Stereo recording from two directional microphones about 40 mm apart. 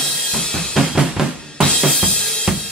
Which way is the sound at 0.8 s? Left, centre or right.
Centre.